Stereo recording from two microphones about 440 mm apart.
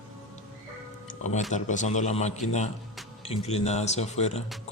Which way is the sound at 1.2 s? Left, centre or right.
Centre.